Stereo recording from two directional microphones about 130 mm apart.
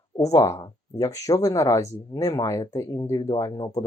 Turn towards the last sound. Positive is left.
turn(degrees=30)  # may be behind; listen again after turning